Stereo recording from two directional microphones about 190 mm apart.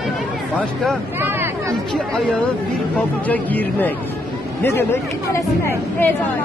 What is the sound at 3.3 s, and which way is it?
Speech, 10° left (ahead or behind).